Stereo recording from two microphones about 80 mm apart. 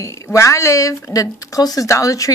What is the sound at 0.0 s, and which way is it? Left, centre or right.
Speech, left.